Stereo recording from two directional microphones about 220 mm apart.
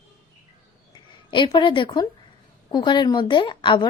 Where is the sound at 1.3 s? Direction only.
20° left (ahead or behind).